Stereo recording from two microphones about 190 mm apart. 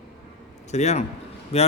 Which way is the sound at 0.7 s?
35° left (ahead or behind).